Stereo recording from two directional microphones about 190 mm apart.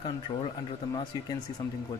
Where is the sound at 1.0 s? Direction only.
20° left (ahead or behind).